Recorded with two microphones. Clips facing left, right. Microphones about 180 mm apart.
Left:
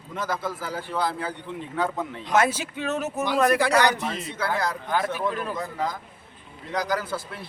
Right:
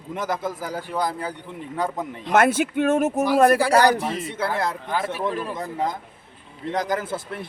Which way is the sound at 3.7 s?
35° right (ahead or behind).